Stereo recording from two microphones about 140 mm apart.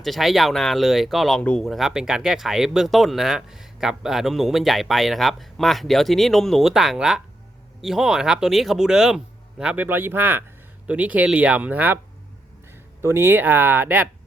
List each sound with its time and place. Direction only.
0.0 s speech: centre (ahead or behind)